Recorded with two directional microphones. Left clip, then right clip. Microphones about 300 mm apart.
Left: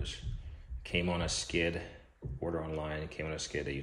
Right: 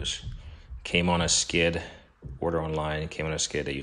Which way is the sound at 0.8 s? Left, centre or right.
Centre.